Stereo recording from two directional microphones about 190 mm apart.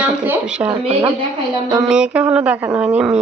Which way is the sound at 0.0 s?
5° right (ahead or behind).